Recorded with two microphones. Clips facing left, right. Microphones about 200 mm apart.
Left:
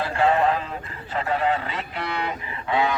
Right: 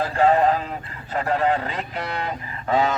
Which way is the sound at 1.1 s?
40° right (ahead or behind).